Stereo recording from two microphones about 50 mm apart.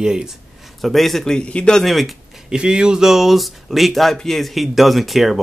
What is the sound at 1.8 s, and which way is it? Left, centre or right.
Speech, centre.